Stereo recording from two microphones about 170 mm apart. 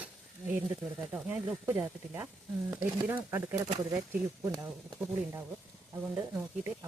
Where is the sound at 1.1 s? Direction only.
10° right (ahead or behind).